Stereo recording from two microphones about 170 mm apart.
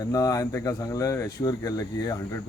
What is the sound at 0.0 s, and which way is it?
Speech, 20° left (ahead or behind).